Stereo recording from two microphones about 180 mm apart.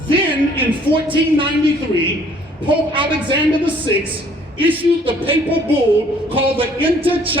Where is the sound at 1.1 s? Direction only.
30° right (ahead or behind).